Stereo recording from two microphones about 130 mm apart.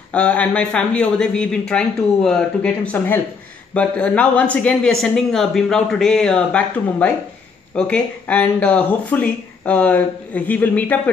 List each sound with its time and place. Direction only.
0.1 s speech: 10° left (ahead or behind)